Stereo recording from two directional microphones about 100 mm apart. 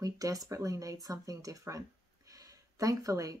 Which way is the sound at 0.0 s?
35° right (ahead or behind).